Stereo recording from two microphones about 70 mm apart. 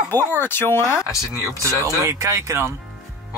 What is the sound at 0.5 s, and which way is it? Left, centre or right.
Speech, left.